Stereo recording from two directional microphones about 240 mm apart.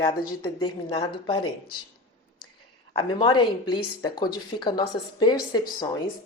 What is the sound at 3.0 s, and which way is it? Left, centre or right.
Speech, centre.